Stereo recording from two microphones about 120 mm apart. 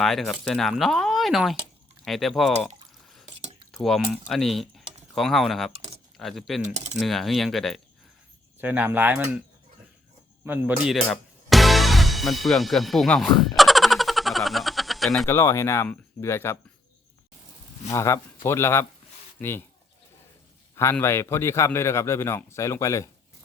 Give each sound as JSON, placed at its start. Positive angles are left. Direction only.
{"t": 0.0, "sound": "speech", "side_deg": 0}
{"t": 3.8, "sound": "speech", "side_deg": 0}
{"t": 8.6, "sound": "speech", "side_deg": -15}
{"t": 10.4, "sound": "speech", "side_deg": -15}
{"t": 10.8, "sound": "speech", "side_deg": 0}
{"t": 13.6, "sound": "a sound", "side_deg": 0}
{"t": 15.3, "sound": "speech", "side_deg": 20}
{"t": 17.8, "sound": "speech", "side_deg": 25}
{"t": 21.0, "sound": "speech", "side_deg": 20}